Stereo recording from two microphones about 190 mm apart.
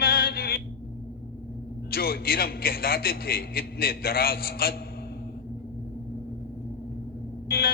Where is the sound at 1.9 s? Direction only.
50° left (ahead or behind).